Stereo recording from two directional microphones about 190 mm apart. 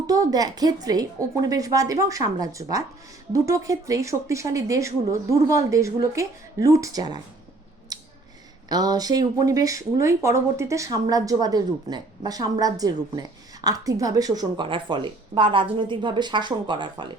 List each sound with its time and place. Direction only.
0.1 s a woman's voice: 20° right (ahead or behind)
7.9 s scissors: 20° right (ahead or behind)
8.7 s a woman's voice: 20° right (ahead or behind)